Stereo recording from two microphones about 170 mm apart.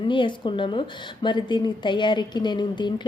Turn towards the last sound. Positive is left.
turn(degrees=25)  # may be behind; listen again after turning